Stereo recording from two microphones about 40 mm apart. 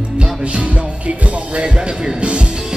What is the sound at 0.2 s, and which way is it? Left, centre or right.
Music, right.